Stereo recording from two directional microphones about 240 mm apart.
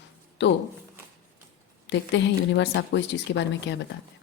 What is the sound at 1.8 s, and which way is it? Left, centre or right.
Speech, left.